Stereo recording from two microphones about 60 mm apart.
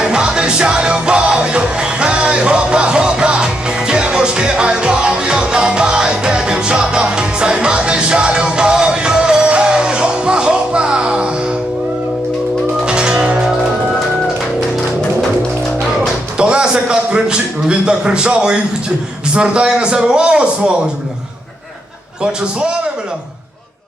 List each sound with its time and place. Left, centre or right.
0.0 s music: centre
12.8 s music: centre
16.4 s a sound: centre
19.3 s a man's voice: centre